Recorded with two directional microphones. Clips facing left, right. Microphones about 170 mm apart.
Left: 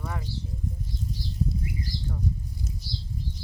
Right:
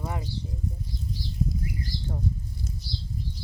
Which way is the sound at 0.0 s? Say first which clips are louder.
Right 2 dB; 20° right (ahead or behind).